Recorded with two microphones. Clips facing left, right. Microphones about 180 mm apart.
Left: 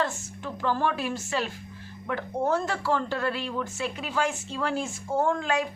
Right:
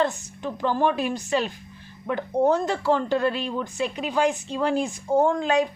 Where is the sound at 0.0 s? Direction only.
20° right (ahead or behind).